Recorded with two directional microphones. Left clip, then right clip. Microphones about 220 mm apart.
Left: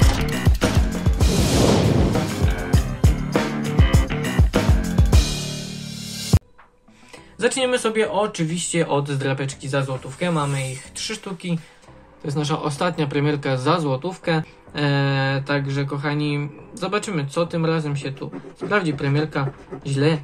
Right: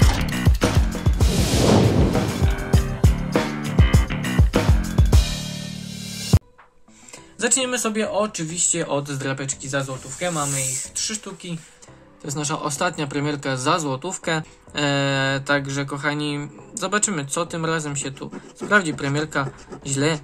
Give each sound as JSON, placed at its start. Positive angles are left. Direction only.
{"t": 0.0, "sound": "music", "side_deg": 0}
{"t": 6.3, "sound": "music", "side_deg": 0}
{"t": 7.3, "sound": "speech", "side_deg": -25}